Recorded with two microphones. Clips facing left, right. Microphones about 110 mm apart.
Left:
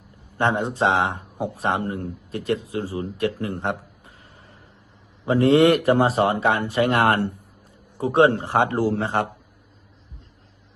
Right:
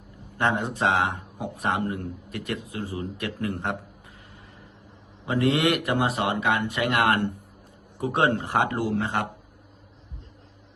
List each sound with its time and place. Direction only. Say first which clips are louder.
0.3 s a man's voice: left 3 dB; 30° left (ahead or behind)